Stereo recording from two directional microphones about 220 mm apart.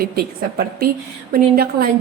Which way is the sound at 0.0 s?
45° right (ahead or behind).